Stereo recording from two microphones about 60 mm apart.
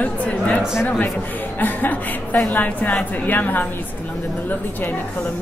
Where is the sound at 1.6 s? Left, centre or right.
Left.